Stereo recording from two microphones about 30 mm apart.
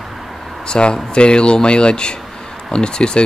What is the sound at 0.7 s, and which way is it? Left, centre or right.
Speech, left.